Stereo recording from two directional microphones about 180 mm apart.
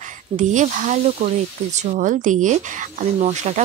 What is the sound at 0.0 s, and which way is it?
Speech, 40° right (ahead or behind).